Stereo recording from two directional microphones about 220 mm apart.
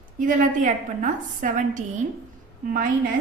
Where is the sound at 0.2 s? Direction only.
35° right (ahead or behind).